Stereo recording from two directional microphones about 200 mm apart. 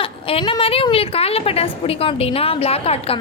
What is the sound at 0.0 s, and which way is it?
A woman's voice, 25° left (ahead or behind).